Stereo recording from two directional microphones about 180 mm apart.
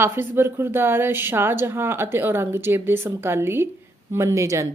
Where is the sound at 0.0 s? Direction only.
15° right (ahead or behind).